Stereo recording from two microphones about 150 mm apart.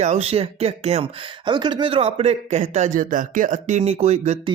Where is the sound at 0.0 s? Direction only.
45° right (ahead or behind).